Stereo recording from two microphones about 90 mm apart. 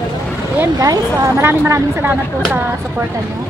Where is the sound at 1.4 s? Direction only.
30° right (ahead or behind).